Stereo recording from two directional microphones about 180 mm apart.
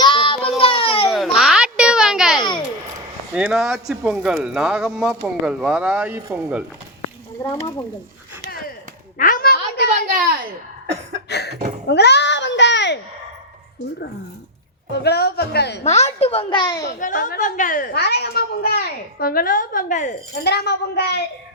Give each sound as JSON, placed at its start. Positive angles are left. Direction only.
{"t": 0.0, "sound": "child singing", "side_deg": 25}
{"t": 1.4, "sound": "a sound", "side_deg": -5}
{"t": 3.3, "sound": "speech", "side_deg": -5}
{"t": 9.1, "sound": "a sound", "side_deg": 45}
{"t": 9.9, "sound": "a sound", "side_deg": -50}
{"t": 11.3, "sound": "cough", "side_deg": 65}
{"t": 11.9, "sound": "a child's voice", "side_deg": 70}
{"t": 15.0, "sound": "a man's voice", "side_deg": 65}
{"t": 15.8, "sound": "a woman's voice", "side_deg": 35}
{"t": 17.0, "sound": "a woman's voice", "side_deg": 45}
{"t": 20.4, "sound": "a child's voice", "side_deg": 65}